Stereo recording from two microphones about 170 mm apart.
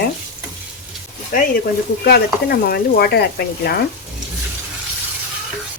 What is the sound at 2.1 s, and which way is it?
Speech, 65° left (ahead or behind).